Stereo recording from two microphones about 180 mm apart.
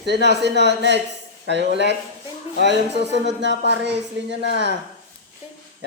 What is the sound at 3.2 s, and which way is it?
A man's voice, 80° right.